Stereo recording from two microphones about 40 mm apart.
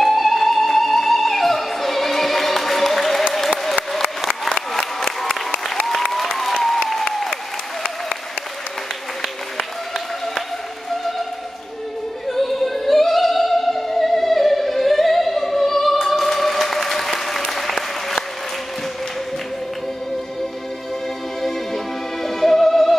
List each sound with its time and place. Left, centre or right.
0.0 s music: centre
3.9 s applause: centre
5.9 s applause: centre
9.2 s applause: centre
12.3 s opera: centre
21.4 s music: centre